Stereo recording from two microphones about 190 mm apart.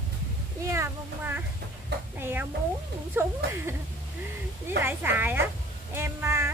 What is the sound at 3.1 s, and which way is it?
Speech, 15° right (ahead or behind).